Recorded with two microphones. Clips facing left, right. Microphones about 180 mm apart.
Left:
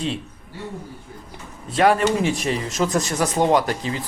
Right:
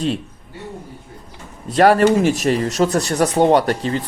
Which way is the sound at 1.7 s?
45° right (ahead or behind).